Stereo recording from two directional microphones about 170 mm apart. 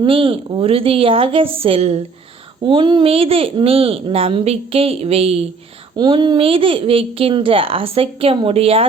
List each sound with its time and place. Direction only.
0.0 s speech: 30° right (ahead or behind)